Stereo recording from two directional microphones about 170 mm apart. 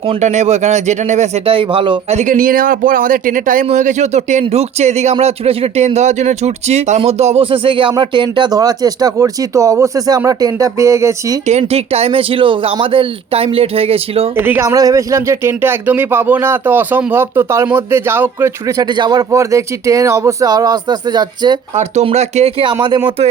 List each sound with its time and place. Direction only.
0.1 s speech: 45° right (ahead or behind)
2.1 s speech: 50° right (ahead or behind); by 11.3 s 15° right (ahead or behind)
11.4 s speech: 40° right (ahead or behind)
14.3 s speech: 15° right (ahead or behind)
18.9 s speech: 25° right (ahead or behind)
21.8 s speech: 40° right (ahead or behind)